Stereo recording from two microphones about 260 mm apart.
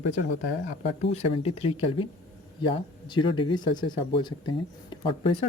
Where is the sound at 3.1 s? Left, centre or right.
Centre.